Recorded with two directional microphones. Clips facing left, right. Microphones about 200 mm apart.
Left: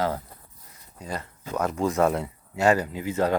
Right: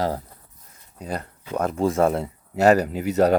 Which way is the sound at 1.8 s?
30° right (ahead or behind).